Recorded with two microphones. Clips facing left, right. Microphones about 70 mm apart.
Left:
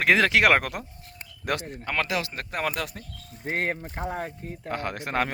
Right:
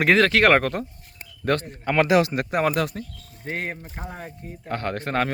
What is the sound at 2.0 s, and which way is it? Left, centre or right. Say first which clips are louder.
Speech: right 10 dB; right.